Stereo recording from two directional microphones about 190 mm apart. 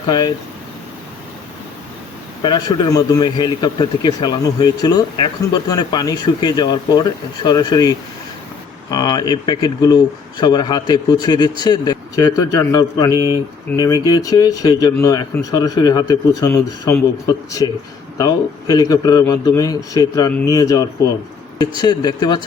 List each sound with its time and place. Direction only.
2.4 s speech: 20° left (ahead or behind)
18.2 s speech: 20° left (ahead or behind)